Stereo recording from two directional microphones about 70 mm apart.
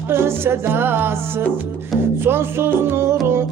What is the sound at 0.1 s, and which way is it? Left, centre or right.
Music, right.